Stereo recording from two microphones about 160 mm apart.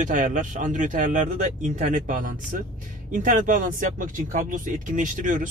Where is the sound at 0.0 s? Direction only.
55° right (ahead or behind).